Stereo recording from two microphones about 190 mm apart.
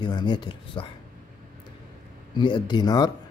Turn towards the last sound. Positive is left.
turn(degrees=20)  # may be behind; listen again after turning